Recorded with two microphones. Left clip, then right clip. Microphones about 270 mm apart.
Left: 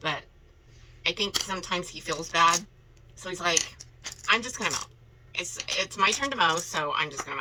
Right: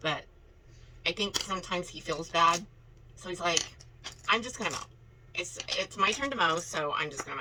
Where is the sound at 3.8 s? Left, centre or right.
Left.